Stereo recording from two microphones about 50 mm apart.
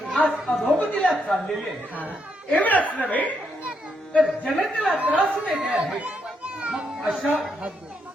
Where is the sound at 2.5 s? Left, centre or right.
Left.